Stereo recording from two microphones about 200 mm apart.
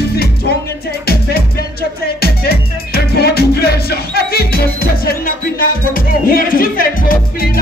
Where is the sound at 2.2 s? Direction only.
50° left (ahead or behind).